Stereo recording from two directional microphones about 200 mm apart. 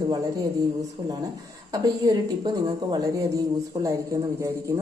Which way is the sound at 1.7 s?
20° right (ahead or behind).